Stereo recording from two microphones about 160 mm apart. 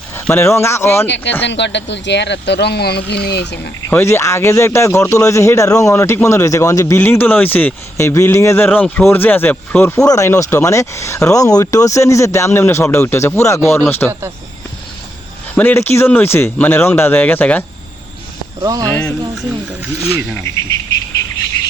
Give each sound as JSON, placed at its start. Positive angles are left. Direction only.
{"t": 0.3, "sound": "speech", "side_deg": 15}
{"t": 1.0, "sound": "speech", "side_deg": 90}
{"t": 3.8, "sound": "speech", "side_deg": 15}
{"t": 15.5, "sound": "speech", "side_deg": 10}
{"t": 18.6, "sound": "speech", "side_deg": -20}
{"t": 18.9, "sound": "speech", "side_deg": 5}